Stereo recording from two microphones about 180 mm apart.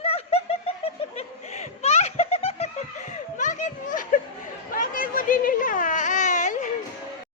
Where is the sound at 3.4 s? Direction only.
45° left (ahead or behind).